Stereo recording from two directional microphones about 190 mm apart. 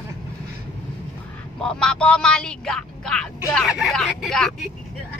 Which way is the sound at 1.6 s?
5° left (ahead or behind).